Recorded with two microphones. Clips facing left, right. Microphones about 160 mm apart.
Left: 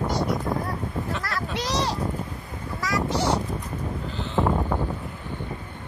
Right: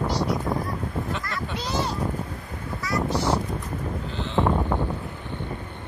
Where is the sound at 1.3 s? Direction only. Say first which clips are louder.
Left 2 dB; 85° left.